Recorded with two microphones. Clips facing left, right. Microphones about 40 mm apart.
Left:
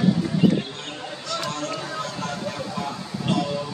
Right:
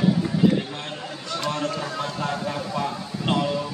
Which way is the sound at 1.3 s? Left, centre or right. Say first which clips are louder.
Right 2 dB; right.